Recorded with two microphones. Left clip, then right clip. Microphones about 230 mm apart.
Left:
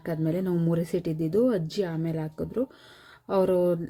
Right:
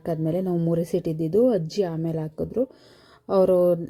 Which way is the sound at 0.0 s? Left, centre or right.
Centre.